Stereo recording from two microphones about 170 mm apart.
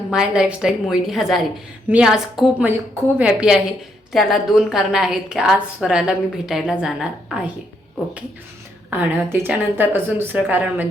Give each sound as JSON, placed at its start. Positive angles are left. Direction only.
{"t": 0.1, "sound": "a woman's voice", "side_deg": -5}
{"t": 8.9, "sound": "a woman's voice", "side_deg": -10}